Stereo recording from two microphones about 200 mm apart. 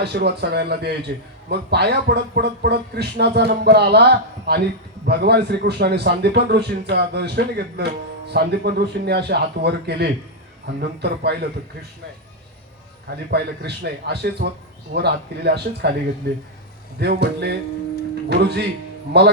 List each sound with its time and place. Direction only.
0.0 s a man's voice: 55° right (ahead or behind)
13.3 s a man's voice: 55° right (ahead or behind)